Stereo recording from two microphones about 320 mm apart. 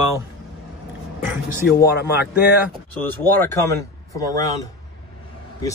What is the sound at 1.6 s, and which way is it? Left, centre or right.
Speech, left.